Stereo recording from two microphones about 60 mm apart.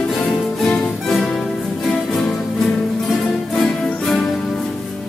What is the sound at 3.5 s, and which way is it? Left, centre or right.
Music, centre.